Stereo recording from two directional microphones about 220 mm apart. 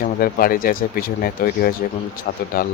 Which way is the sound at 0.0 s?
40° left (ahead or behind).